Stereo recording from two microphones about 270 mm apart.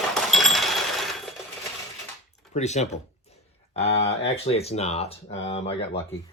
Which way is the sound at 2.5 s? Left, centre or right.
Left.